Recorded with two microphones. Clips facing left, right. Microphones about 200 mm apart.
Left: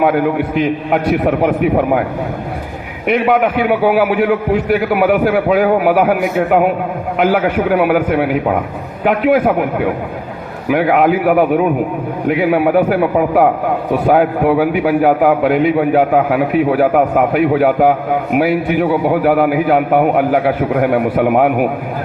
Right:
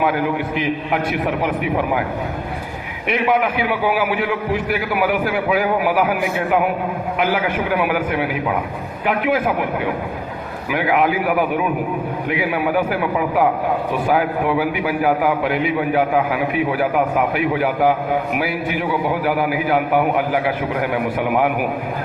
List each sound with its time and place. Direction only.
0.0 s a man's voice: 55° left (ahead or behind)
3.1 s a man's voice: 55° left (ahead or behind)
10.7 s a man's voice: 55° left (ahead or behind)